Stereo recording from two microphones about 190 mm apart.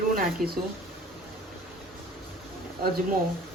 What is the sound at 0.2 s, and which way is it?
Speech, 55° right (ahead or behind).